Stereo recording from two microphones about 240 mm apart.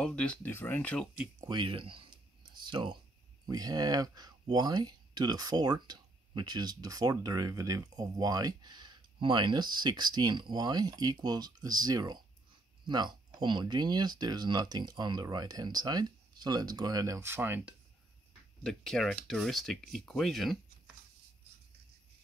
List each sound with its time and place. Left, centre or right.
0.0 s speech: centre
1.1 s speech: centre
1.5 s speech: right
18.6 s speech: centre